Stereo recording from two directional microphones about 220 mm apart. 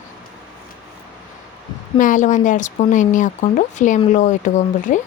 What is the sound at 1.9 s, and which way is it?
Speech, 35° left (ahead or behind).